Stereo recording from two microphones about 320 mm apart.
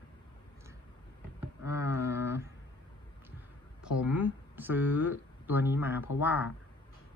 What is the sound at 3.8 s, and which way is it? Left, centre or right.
Speech, centre.